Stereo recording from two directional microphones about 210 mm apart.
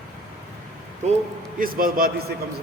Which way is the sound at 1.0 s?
35° right (ahead or behind).